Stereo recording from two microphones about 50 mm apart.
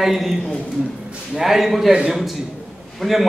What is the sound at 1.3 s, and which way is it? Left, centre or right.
A man's voice, centre.